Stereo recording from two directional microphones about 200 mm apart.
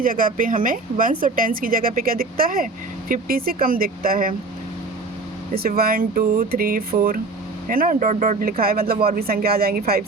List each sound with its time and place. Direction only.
0.0 s speech: 45° right (ahead or behind)
5.5 s speech: 50° right (ahead or behind)